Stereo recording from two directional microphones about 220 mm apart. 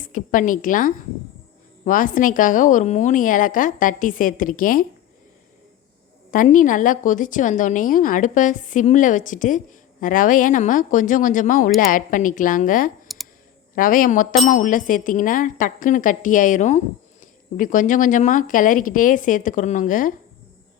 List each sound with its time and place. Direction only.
0.0 s speech: 35° left (ahead or behind)
6.3 s speech: 35° left (ahead or behind)
13.1 s clicking: centre (ahead or behind)
13.7 s speech: 40° left (ahead or behind)